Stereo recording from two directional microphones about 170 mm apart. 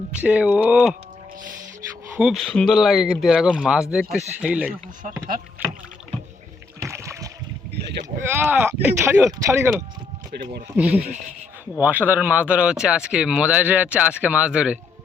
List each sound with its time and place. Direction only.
0.2 s speech: 5° right (ahead or behind)
2.1 s speech: centre (ahead or behind)
6.8 s rowboat: 15° right (ahead or behind)
8.2 s speech: 10° right (ahead or behind)
10.8 s speech: 70° right (ahead or behind)
11.8 s speech: 10° right (ahead or behind)